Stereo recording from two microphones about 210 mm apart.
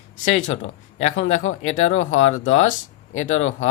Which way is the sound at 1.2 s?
35° left (ahead or behind).